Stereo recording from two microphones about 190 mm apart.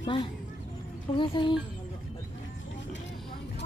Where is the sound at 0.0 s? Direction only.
25° left (ahead or behind).